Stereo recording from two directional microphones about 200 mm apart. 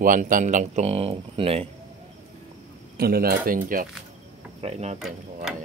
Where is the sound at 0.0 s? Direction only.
45° right (ahead or behind).